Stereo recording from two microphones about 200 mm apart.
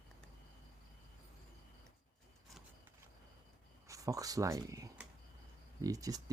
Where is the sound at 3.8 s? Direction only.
15° right (ahead or behind).